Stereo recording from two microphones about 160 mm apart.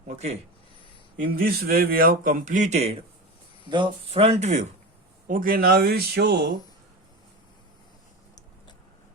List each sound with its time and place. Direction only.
0.1 s speech: 45° right (ahead or behind)
1.4 s a man's voice: 70° right (ahead or behind); by 3.0 s 40° right (ahead or behind)
3.7 s speech: 30° right (ahead or behind); by 4.7 s 45° right (ahead or behind)
5.3 s speech: 60° right (ahead or behind); by 6.5 s 90° right